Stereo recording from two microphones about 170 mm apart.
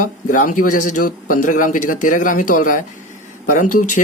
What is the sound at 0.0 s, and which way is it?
Speech, 50° left (ahead or behind).